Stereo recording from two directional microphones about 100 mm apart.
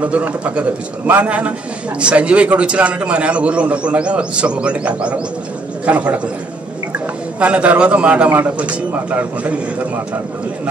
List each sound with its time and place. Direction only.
0.0 s a man's voice: 15° right (ahead or behind)
7.3 s a man's voice: 15° right (ahead or behind)